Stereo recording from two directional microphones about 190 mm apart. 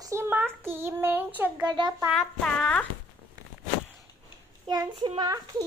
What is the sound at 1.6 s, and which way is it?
Speech, 25° right (ahead or behind).